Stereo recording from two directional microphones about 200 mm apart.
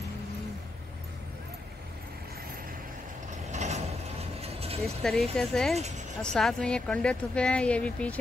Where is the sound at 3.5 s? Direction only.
35° right (ahead or behind).